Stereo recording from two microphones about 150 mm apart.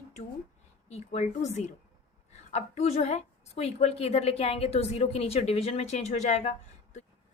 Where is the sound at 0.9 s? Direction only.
45° left (ahead or behind).